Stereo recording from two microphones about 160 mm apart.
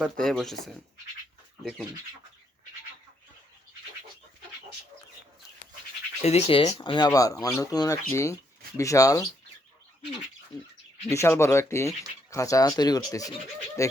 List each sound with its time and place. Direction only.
0.0 s speech: centre (ahead or behind)
6.2 s speech: 40° left (ahead or behind); by 9.2 s 20° left (ahead or behind)
11.1 s speech: 15° left (ahead or behind)